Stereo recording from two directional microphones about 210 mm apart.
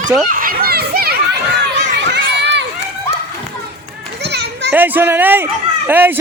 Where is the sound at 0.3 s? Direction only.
45° right (ahead or behind).